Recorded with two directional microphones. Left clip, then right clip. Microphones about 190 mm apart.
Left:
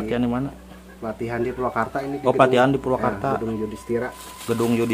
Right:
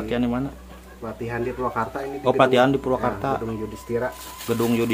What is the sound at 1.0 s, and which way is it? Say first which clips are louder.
Speech: left 2 dB; 40° left (ahead or behind).